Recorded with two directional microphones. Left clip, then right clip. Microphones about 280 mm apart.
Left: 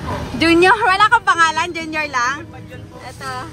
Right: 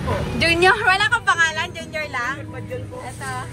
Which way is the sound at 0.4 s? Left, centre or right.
Left.